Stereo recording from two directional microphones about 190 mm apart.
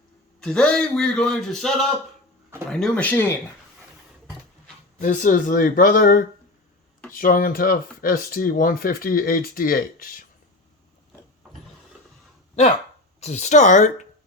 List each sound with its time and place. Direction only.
0.3 s a man's voice: 5° left (ahead or behind)
4.9 s speech: 45° left (ahead or behind)
13.1 s speech: 35° left (ahead or behind)